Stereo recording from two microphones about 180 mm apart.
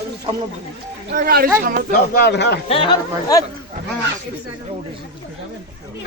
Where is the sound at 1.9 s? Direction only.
60° left (ahead or behind).